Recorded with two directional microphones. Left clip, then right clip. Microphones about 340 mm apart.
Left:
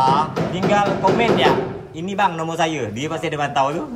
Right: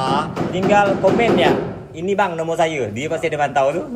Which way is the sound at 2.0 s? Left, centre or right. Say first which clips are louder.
Right 1 dB; left.